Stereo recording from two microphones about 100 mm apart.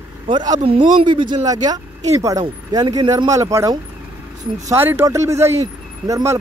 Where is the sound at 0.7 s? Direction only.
60° right (ahead or behind).